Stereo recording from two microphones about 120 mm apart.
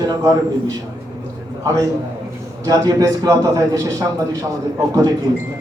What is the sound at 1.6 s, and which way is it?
A man's voice, 25° right (ahead or behind).